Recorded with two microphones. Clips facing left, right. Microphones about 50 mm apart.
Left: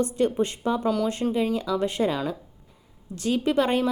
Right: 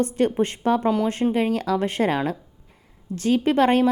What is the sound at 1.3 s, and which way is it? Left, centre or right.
A woman's voice, right.